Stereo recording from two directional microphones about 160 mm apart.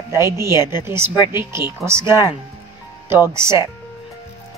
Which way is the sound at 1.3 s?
15° right (ahead or behind).